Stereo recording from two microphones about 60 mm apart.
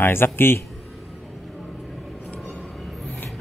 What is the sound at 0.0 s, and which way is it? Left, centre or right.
Speech, left.